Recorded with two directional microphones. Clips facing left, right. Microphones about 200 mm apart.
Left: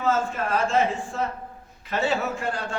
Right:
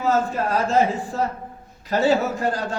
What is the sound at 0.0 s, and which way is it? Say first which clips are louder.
A man's voice: right 3 dB; 35° right (ahead or behind).